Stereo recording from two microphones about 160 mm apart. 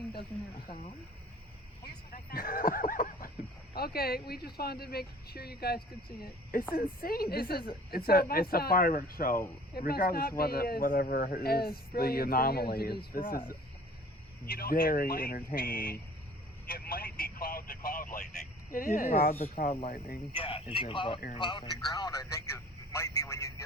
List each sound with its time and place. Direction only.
2.1 s a sound: 60° left (ahead or behind)
3.8 s speech: 70° left (ahead or behind)
6.2 s speech: 65° left (ahead or behind)
9.7 s speech: 70° left (ahead or behind)
14.4 s speech: 65° left (ahead or behind)
19.6 s speech: 45° left (ahead or behind)
20.3 s a man's voice: 35° left (ahead or behind); by 23.6 s 20° left (ahead or behind)